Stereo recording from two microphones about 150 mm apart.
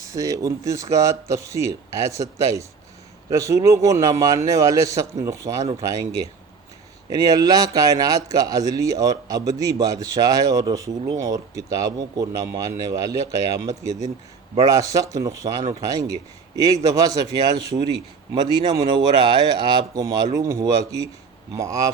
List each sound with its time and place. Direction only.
0.0 s speech: 20° right (ahead or behind)